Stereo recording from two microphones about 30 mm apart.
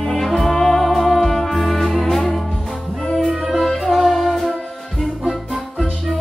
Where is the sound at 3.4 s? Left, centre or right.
Centre.